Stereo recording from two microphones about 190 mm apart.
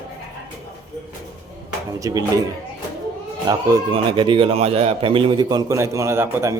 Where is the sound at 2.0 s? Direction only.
15° right (ahead or behind).